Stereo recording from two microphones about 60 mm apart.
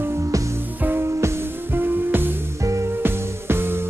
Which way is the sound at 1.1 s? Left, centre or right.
Right.